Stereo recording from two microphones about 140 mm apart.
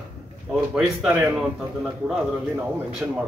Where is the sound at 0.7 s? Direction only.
5° right (ahead or behind).